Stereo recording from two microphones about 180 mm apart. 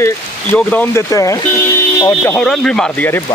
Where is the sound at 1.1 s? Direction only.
20° left (ahead or behind).